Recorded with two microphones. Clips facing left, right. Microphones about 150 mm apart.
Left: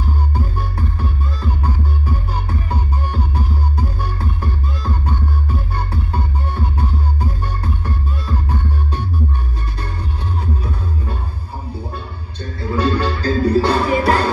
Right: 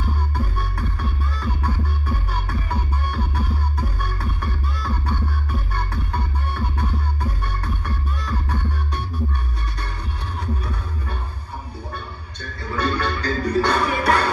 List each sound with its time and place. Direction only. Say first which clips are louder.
0.3 s music: left 3 dB; 30° left (ahead or behind)
10.4 s music: left 1 dB; 30° left (ahead or behind)